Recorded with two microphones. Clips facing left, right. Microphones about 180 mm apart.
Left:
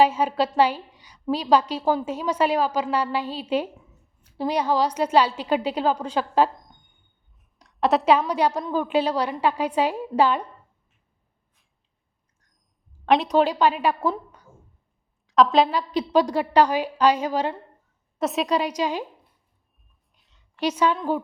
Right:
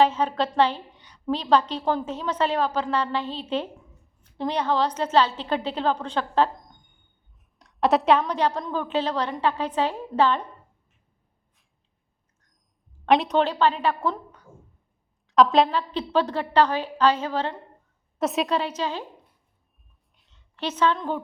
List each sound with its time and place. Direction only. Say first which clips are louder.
0.0 s a woman's voice: left 1 dB; 10° left (ahead or behind)
7.6 s a woman's voice: even; centre (ahead or behind)
13.1 s a woman's voice: left 1 dB; centre (ahead or behind)
13.4 s a woman's voice: left 2 dB; 10° left (ahead or behind)
15.3 s a woman's voice: even; centre (ahead or behind)
15.7 s a woman's voice: left 3 dB; 10° left (ahead or behind)
18.2 s a woman's voice: even; centre (ahead or behind)
18.5 s a woman's voice: left 3 dB; 10° left (ahead or behind)
20.1 s a sound: even; centre (ahead or behind)
20.6 s a woman's voice: left 2 dB; 10° left (ahead or behind)